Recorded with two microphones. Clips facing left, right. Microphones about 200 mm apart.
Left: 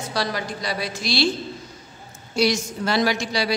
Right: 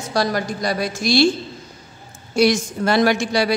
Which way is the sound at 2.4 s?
50° right (ahead or behind).